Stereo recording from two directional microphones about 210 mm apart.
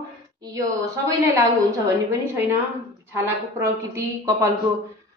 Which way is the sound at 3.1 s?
10° right (ahead or behind).